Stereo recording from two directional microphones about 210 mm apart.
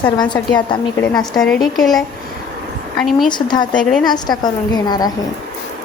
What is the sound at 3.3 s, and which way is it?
Speech, 20° left (ahead or behind).